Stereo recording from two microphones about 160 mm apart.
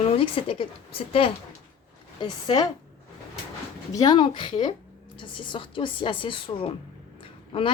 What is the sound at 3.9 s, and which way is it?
A woman's voice, 25° left (ahead or behind).